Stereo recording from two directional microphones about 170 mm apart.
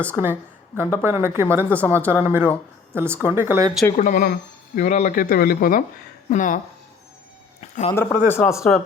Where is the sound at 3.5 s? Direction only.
20° right (ahead or behind).